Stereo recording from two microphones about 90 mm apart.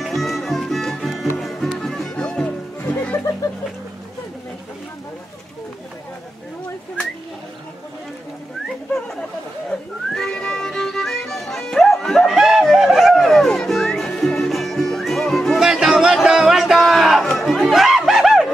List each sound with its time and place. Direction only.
0.0 s music: centre (ahead or behind); by 3.2 s 15° left (ahead or behind)
9.7 s music: 5° left (ahead or behind)
17.4 s a sound: centre (ahead or behind)